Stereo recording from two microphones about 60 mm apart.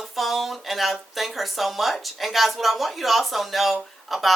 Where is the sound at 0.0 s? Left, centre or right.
Centre.